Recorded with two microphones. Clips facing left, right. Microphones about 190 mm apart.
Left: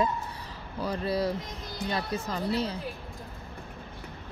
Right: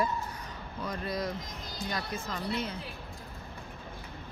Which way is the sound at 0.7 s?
30° left (ahead or behind).